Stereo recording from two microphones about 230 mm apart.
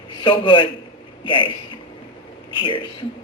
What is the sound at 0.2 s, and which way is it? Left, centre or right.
A woman's voice, left.